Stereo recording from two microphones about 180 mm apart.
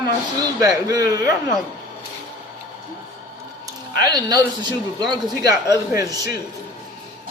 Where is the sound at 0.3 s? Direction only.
20° right (ahead or behind).